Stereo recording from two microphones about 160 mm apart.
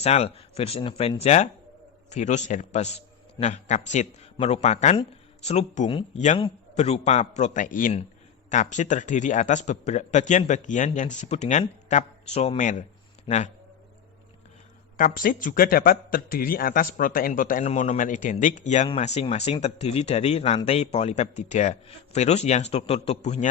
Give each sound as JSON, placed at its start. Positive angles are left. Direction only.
{"t": 0.0, "sound": "a man's voice", "side_deg": 40}
{"t": 14.9, "sound": "a man's voice", "side_deg": 60}